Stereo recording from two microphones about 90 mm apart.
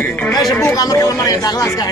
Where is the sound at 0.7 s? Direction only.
40° left (ahead or behind).